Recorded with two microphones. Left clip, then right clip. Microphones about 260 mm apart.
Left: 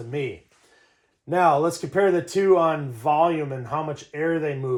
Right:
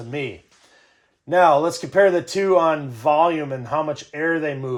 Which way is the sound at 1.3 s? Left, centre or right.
Right.